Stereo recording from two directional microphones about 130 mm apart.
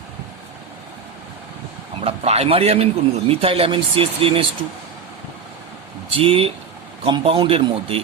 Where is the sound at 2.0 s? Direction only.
50° right (ahead or behind).